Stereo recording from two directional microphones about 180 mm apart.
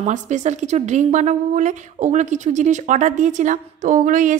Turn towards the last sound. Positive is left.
turn(degrees=-45)  # may be behind; listen again after turning